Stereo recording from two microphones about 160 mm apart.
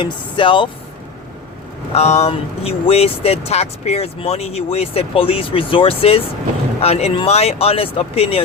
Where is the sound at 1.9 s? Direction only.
40° left (ahead or behind).